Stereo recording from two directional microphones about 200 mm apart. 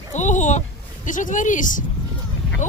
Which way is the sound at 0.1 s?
35° left (ahead or behind).